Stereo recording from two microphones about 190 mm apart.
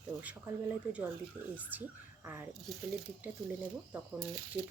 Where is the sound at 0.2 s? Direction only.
10° right (ahead or behind).